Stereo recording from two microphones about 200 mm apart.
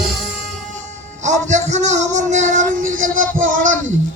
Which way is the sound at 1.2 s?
35° right (ahead or behind).